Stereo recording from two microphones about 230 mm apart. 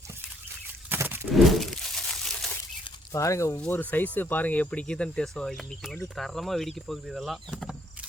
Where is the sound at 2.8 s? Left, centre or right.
Centre.